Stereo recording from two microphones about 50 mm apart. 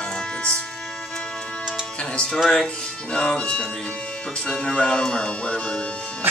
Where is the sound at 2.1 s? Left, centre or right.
Centre.